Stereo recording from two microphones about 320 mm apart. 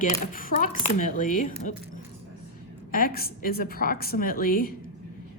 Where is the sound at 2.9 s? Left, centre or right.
Left.